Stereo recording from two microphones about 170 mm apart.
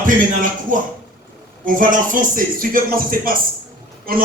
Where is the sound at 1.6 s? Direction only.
50° right (ahead or behind).